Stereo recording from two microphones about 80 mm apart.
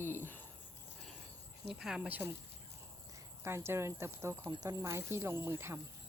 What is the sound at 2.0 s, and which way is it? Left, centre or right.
Speech, right.